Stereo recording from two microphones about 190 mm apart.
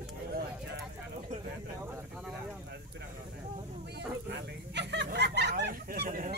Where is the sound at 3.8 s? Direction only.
60° right (ahead or behind).